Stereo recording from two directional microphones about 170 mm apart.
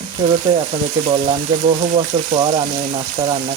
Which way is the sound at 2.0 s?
35° right (ahead or behind).